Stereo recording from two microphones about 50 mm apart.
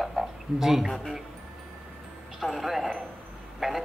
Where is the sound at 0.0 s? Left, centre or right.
Centre.